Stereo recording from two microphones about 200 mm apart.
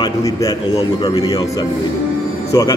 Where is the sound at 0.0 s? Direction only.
15° left (ahead or behind).